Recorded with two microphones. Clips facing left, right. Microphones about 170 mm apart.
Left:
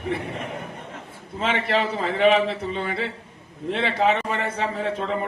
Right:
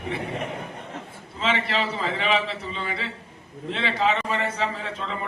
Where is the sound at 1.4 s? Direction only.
50° left (ahead or behind).